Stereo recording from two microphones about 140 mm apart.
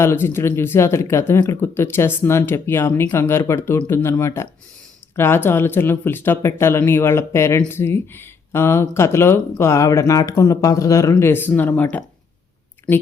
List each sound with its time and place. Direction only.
0.0 s speech: 20° left (ahead or behind)